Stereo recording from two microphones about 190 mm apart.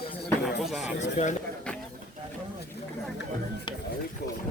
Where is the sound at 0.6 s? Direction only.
Centre (ahead or behind).